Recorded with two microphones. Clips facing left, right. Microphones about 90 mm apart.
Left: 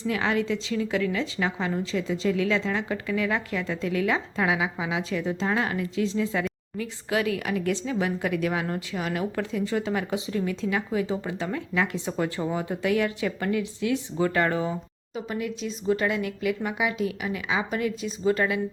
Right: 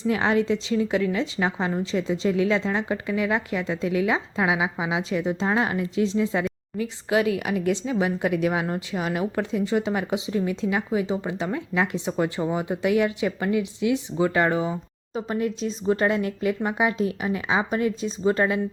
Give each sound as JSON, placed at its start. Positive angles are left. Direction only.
{"t": 0.1, "sound": "speech", "side_deg": -30}
{"t": 15.1, "sound": "speech", "side_deg": -35}